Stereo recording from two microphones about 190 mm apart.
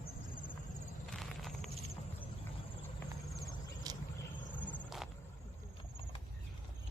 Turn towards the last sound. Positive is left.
turn(degrees=0)  # may be behind; listen again after turning